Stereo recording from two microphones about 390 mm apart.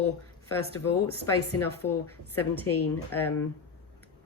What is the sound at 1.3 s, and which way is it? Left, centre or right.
Speech, left.